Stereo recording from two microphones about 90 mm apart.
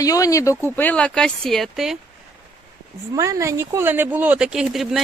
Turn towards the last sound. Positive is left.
turn(degrees=-5)  # may be behind; listen again after turning